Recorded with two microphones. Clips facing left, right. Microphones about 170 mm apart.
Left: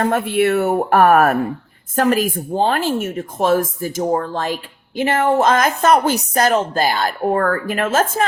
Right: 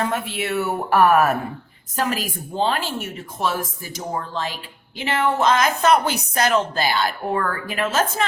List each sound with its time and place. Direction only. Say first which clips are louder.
0.0 s a woman's voice: left 8 dB; 55° left (ahead or behind)